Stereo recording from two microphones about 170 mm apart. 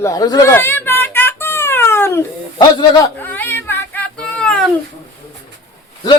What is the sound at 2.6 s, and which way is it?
Speech, 25° left (ahead or behind).